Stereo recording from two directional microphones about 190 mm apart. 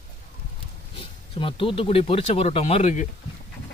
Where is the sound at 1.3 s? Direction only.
25° left (ahead or behind).